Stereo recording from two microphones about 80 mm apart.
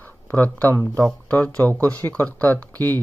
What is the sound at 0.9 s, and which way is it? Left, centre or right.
Speech, centre.